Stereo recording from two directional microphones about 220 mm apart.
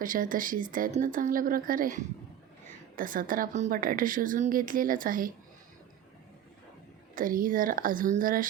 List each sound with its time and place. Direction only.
0.0 s a woman's voice: 40° right (ahead or behind)
7.2 s a woman's voice: 40° right (ahead or behind)